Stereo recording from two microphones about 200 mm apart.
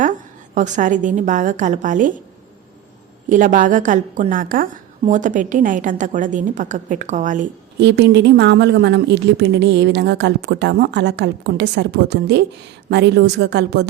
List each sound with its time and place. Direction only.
0.0 s a woman's voice: 40° right (ahead or behind)
3.2 s a woman's voice: 40° right (ahead or behind)
7.8 s a woman's voice: 60° right (ahead or behind)